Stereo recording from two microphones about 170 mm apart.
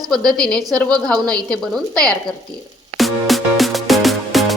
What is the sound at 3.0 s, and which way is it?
Music, centre (ahead or behind).